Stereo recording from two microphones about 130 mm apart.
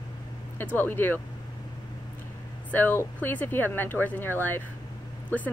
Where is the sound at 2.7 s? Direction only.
15° left (ahead or behind).